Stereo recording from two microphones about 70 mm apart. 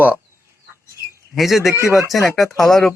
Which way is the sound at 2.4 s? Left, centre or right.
Centre.